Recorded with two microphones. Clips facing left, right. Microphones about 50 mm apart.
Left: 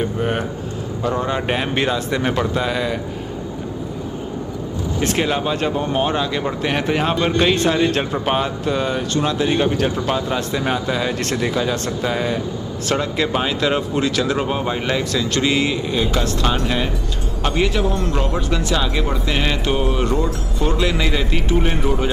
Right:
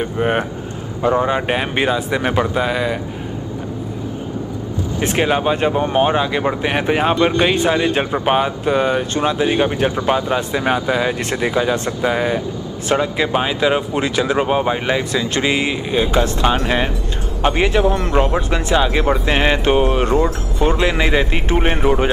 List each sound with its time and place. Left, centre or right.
0.2 s speech: right
5.0 s speech: centre